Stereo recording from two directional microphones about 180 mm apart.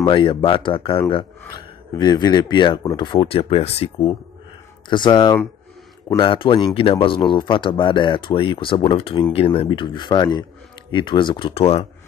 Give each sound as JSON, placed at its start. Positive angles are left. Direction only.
{"t": 0.0, "sound": "speech", "side_deg": 30}